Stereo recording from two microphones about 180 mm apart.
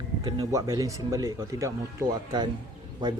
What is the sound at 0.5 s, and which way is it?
Speech, 20° right (ahead or behind).